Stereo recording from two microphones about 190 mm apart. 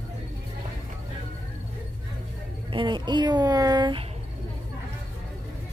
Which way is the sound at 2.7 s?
25° right (ahead or behind).